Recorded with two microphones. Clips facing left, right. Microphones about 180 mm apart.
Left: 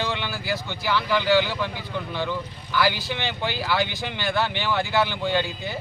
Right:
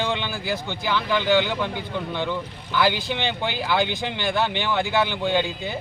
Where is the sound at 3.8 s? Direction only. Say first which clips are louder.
Right 2 dB; 55° right (ahead or behind).